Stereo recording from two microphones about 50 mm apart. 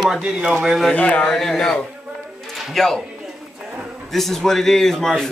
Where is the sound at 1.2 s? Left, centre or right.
Centre.